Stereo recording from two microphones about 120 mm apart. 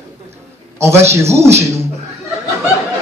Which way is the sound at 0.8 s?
20° right (ahead or behind).